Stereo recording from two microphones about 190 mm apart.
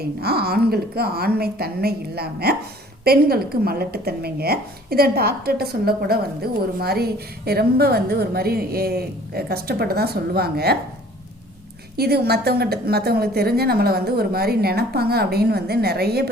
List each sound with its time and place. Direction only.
0.0 s a woman's voice: 55° right (ahead or behind)
11.9 s a woman's voice: 55° right (ahead or behind)